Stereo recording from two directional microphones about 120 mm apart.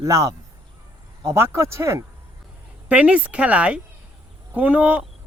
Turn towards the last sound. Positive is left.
turn(degrees=-10)  # may be behind; listen again after turning